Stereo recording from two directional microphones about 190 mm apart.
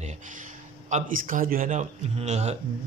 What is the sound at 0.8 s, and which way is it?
Speech, 40° right (ahead or behind).